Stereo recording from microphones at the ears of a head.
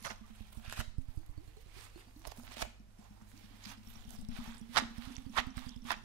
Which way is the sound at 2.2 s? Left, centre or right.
Right.